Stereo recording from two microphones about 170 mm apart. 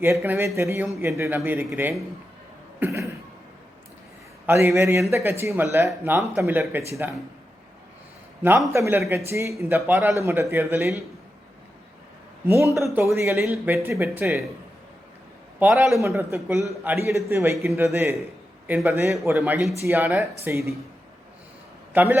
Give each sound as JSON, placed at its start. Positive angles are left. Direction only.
{"t": 0.0, "sound": "speech", "side_deg": -15}
{"t": 2.8, "sound": "cough", "side_deg": -15}
{"t": 4.4, "sound": "speech", "side_deg": -15}
{"t": 8.4, "sound": "speech", "side_deg": -15}
{"t": 12.8, "sound": "speech", "side_deg": -15}
{"t": 15.5, "sound": "a man's voice", "side_deg": -5}
{"t": 16.0, "sound": "speech", "side_deg": -15}
{"t": 21.9, "sound": "speech", "side_deg": -10}